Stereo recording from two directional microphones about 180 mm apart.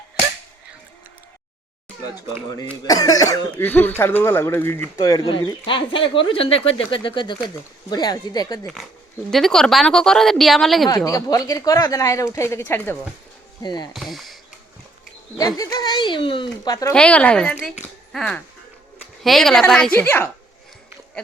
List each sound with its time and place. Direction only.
2.8 s speech: 20° left (ahead or behind)
8.6 s a woman's voice: centre (ahead or behind)
10.8 s speech: 20° left (ahead or behind)
13.6 s speech: 25° left (ahead or behind)
13.9 s speech: centre (ahead or behind)
15.4 s speech: 20° left (ahead or behind)
16.6 s speech: 15° left (ahead or behind)
16.9 s a woman's voice: 5° left (ahead or behind)